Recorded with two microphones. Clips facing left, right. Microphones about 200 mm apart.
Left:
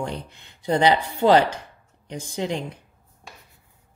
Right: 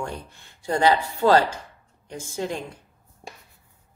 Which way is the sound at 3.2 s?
40° right (ahead or behind).